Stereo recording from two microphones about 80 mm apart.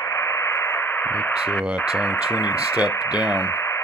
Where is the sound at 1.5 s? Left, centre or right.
Centre.